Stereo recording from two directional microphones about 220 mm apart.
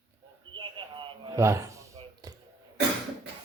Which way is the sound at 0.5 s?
20° right (ahead or behind).